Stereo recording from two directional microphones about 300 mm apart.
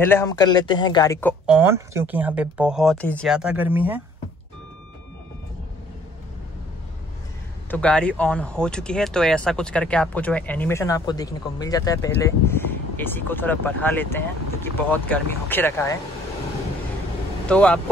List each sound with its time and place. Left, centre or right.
0.0 s speech: centre
1.4 s speech: centre
7.7 s speech: centre
17.5 s speech: centre